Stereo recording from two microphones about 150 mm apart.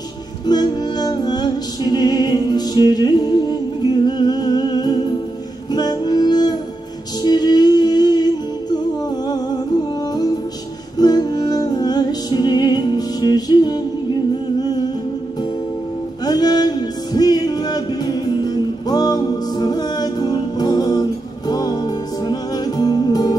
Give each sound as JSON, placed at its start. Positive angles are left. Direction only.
{"t": 0.5, "sound": "music", "side_deg": 25}
{"t": 11.0, "sound": "music", "side_deg": 25}
{"t": 16.3, "sound": "music", "side_deg": 25}